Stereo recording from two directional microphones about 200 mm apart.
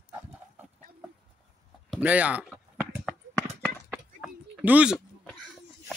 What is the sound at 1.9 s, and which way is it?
Speech, 5° right (ahead or behind).